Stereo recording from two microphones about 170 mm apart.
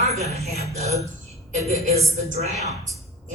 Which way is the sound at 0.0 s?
40° right (ahead or behind).